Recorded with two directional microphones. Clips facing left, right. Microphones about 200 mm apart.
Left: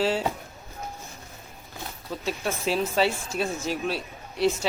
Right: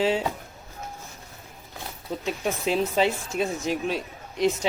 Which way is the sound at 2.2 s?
15° right (ahead or behind).